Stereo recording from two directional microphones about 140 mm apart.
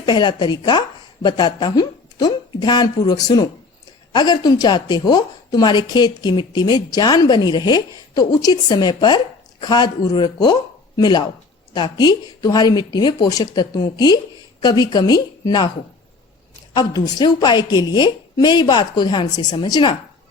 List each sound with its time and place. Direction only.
0.0 s a woman's voice: 30° left (ahead or behind)
16.7 s a woman's voice: 30° left (ahead or behind)